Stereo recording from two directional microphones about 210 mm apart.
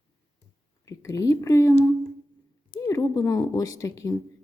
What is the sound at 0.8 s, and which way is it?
Speech, 15° left (ahead or behind).